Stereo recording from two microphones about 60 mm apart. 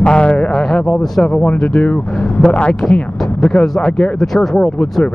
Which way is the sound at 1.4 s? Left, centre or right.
Left.